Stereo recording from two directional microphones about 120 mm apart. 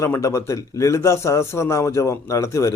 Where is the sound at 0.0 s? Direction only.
25° left (ahead or behind).